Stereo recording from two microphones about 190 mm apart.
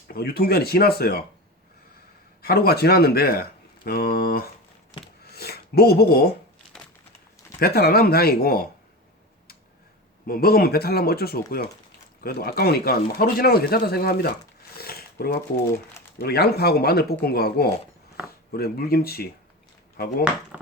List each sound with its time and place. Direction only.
0.1 s speech: 55° left (ahead or behind)
2.4 s speech: 55° left (ahead or behind)
7.6 s speech: 55° left (ahead or behind)
10.2 s speech: 50° left (ahead or behind)
14.8 s zipper: 55° left (ahead or behind)
16.1 s speech: 55° left (ahead or behind)